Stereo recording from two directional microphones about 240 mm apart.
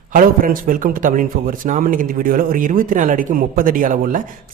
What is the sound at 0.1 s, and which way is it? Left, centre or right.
A man's voice, right.